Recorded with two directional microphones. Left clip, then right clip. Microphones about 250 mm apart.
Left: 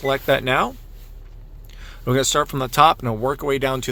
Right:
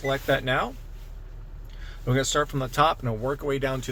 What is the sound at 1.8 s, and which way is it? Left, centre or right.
Speech, left.